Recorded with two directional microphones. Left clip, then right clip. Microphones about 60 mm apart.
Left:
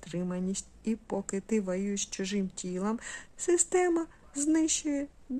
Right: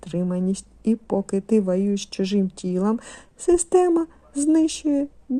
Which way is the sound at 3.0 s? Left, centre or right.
Right.